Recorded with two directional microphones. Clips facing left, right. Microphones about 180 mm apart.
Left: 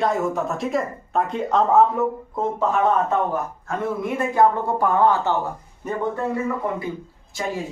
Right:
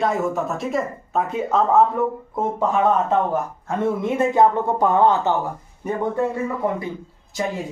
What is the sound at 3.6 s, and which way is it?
A man's voice, 25° right (ahead or behind).